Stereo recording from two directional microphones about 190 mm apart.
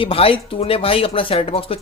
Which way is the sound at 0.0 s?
30° left (ahead or behind).